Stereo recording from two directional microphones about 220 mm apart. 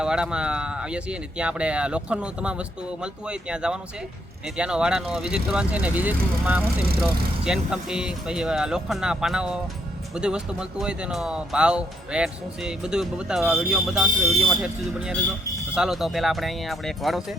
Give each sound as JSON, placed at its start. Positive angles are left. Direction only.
{"t": 0.0, "sound": "speech", "side_deg": -5}